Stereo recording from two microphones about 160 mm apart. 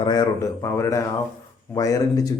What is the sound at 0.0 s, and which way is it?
A man's voice, 25° left (ahead or behind).